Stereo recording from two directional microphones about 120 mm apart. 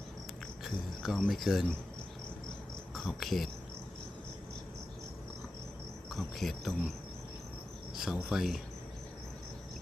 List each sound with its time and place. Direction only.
0.6 s cricket: 5° right (ahead or behind)
1.2 s insect: centre (ahead or behind)
2.9 s speech: centre (ahead or behind)
6.1 s insect: centre (ahead or behind)
7.9 s insect: 5° right (ahead or behind)